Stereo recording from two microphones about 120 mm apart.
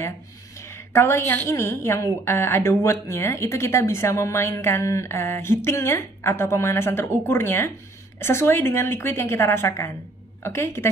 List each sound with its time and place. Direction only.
0.6 s a woman's voice: 20° left (ahead or behind)